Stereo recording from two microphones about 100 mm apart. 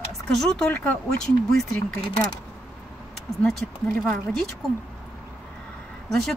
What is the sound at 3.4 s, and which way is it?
Speech, 5° left (ahead or behind).